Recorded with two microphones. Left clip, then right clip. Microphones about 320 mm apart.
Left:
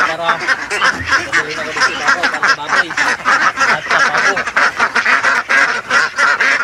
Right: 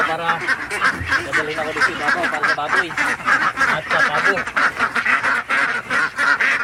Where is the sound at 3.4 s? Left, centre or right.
Left.